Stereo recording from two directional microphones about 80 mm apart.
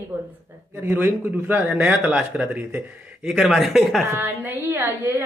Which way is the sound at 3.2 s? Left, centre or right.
Centre.